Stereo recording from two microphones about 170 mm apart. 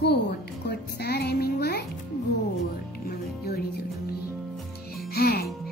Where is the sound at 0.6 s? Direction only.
70° left (ahead or behind).